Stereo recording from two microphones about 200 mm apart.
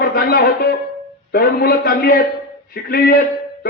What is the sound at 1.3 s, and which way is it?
A man's voice, 50° left (ahead or behind).